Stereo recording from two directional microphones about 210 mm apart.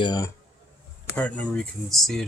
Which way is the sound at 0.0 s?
20° left (ahead or behind).